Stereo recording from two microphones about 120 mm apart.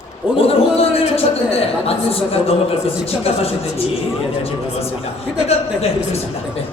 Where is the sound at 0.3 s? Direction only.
55° left (ahead or behind).